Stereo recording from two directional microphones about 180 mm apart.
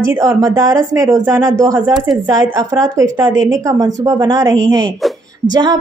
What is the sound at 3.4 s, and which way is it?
A woman's voice, 20° right (ahead or behind).